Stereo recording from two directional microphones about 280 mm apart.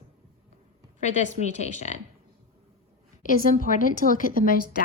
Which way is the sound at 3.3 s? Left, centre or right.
Left.